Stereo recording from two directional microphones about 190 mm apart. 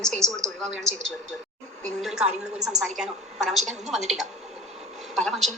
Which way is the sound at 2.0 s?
Centre (ahead or behind).